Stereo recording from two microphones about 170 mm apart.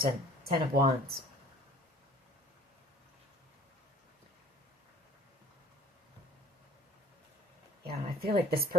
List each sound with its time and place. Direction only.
0.0 s speech: 60° right (ahead or behind)
7.9 s a woman's voice: 65° right (ahead or behind)